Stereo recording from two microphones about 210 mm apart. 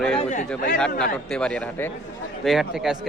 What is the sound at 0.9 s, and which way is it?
Speech, 5° left (ahead or behind).